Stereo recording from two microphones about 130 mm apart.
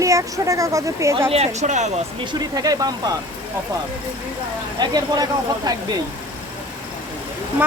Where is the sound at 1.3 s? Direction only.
60° right (ahead or behind).